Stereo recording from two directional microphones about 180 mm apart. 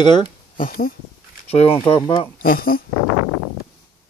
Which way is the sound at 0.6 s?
50° left (ahead or behind).